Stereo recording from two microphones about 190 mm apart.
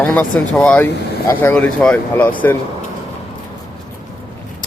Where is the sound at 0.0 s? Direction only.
5° left (ahead or behind).